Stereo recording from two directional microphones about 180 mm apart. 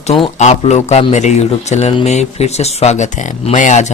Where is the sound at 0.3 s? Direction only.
40° left (ahead or behind).